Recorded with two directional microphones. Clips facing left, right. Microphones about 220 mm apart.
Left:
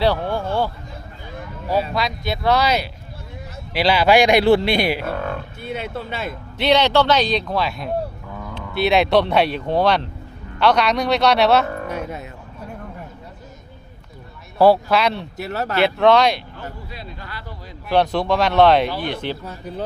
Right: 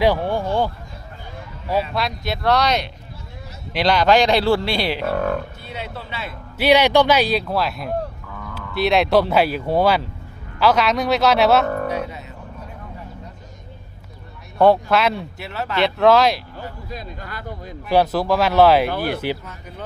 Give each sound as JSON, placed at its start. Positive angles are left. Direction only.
{"t": 0.0, "sound": "a sound", "side_deg": -15}
{"t": 1.9, "sound": "speech", "side_deg": 0}
{"t": 5.1, "sound": "a sound", "side_deg": -45}
{"t": 5.5, "sound": "speech", "side_deg": 50}
{"t": 6.6, "sound": "speech", "side_deg": -10}
{"t": 11.9, "sound": "music", "side_deg": 50}
{"t": 14.6, "sound": "speech", "side_deg": 0}
{"t": 15.4, "sound": "speech", "side_deg": 40}
{"t": 15.8, "sound": "speech", "side_deg": 0}
{"t": 16.9, "sound": "speech", "side_deg": -45}
{"t": 17.8, "sound": "speech", "side_deg": -5}
{"t": 19.5, "sound": "speech", "side_deg": 35}